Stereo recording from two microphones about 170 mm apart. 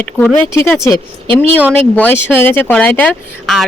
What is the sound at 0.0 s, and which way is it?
Speech, 10° left (ahead or behind).